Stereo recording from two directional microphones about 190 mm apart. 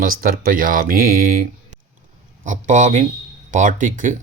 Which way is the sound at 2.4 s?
40° right (ahead or behind).